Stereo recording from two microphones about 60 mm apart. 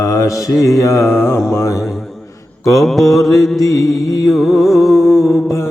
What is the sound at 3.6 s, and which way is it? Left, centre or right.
Music, left.